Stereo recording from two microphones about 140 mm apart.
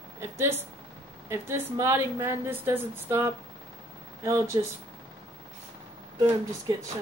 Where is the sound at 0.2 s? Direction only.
20° right (ahead or behind).